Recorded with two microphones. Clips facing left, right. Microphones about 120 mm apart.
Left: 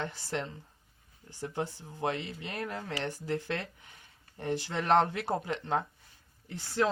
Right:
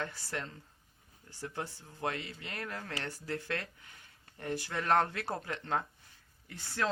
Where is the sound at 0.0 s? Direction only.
20° left (ahead or behind).